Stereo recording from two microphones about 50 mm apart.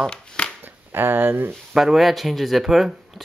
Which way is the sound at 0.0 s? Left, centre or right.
Centre.